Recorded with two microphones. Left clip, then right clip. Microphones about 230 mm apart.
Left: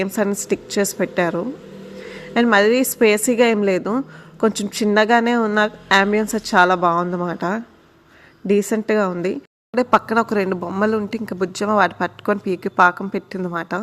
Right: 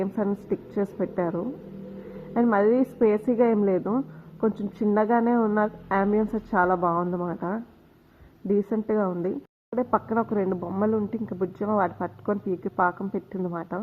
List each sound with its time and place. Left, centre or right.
0.0 s a woman's voice: left